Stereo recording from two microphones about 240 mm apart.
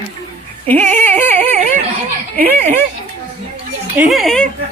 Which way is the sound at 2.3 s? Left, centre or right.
Right.